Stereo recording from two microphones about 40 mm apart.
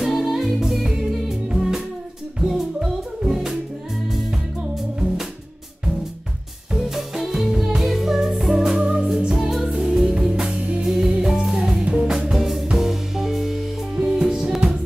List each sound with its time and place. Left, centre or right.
0.0 s music: centre
6.8 s music: centre
8.7 s music: right
9.3 s music: centre
13.9 s music: centre